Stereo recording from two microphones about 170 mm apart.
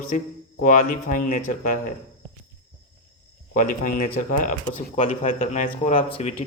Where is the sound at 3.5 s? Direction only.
50° left (ahead or behind).